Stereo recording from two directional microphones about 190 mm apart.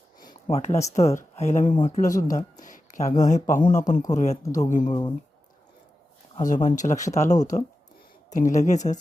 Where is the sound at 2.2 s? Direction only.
45° left (ahead or behind).